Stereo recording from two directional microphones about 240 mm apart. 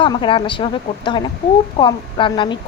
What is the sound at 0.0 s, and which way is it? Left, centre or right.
A woman's voice, left.